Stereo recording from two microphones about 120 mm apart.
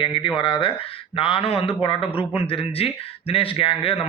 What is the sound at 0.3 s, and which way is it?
Speech, 45° left (ahead or behind).